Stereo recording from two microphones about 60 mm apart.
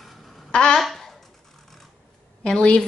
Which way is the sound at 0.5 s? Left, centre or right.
Centre.